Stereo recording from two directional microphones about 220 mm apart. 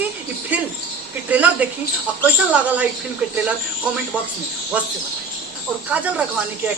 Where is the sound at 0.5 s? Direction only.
5° right (ahead or behind).